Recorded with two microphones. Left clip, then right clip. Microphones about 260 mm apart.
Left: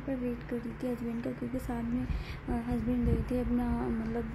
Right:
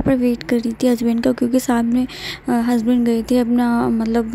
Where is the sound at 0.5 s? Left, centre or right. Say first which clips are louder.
Right 18 dB; right.